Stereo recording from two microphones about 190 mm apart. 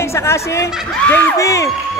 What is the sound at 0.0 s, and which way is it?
Speech, 15° left (ahead or behind).